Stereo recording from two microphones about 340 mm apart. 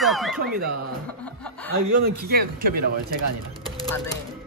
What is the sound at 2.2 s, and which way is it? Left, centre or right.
Speech, right.